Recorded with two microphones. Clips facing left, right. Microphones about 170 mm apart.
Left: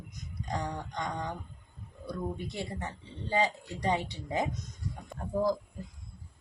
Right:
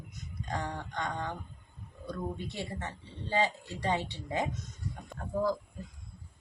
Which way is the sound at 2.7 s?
15° left (ahead or behind).